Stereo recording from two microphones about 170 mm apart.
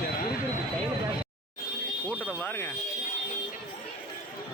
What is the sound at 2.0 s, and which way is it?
Speech, 10° right (ahead or behind).